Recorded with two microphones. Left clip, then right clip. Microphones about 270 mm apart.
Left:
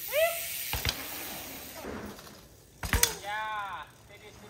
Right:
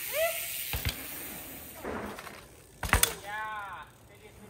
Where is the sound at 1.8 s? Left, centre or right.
Right.